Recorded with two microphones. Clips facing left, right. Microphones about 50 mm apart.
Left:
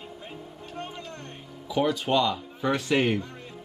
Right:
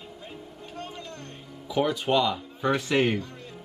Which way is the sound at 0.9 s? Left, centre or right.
Left.